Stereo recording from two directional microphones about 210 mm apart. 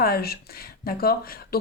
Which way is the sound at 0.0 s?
45° left (ahead or behind).